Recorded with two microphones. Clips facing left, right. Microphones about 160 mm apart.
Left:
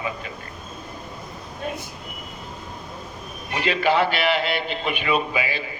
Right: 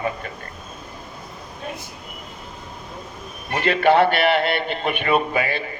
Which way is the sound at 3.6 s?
55° right (ahead or behind).